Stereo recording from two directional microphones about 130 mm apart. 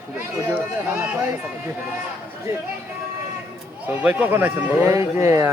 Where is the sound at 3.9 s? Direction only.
10° right (ahead or behind).